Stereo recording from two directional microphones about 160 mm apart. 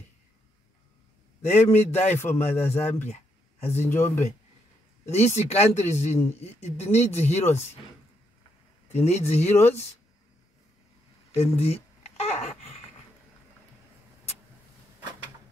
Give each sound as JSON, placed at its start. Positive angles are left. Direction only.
{"t": 1.7, "sound": "a man's voice", "side_deg": 15}
{"t": 5.1, "sound": "speech", "side_deg": 45}
{"t": 8.9, "sound": "speech", "side_deg": 40}
{"t": 9.5, "sound": "a man's voice", "side_deg": 15}
{"t": 11.3, "sound": "a sound", "side_deg": 40}